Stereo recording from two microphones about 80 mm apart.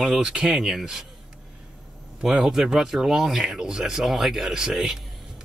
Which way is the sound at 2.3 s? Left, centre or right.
Centre.